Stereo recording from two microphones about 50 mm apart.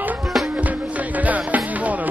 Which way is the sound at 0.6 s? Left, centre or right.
Right.